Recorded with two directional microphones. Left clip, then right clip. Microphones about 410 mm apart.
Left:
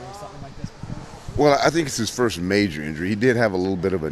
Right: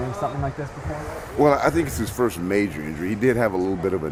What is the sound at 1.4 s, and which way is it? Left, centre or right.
Speech, left.